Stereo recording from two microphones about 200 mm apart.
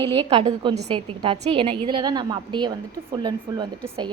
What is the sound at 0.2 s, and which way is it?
A woman's voice, 30° right (ahead or behind).